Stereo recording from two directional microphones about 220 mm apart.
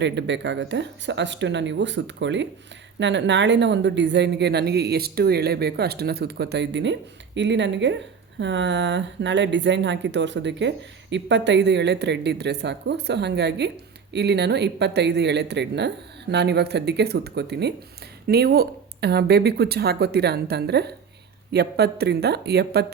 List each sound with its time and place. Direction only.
0.0 s speech: 55° right (ahead or behind)